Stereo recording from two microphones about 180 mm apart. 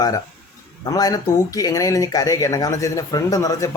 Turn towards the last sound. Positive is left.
turn(degrees=20)  # may be behind; listen again after turning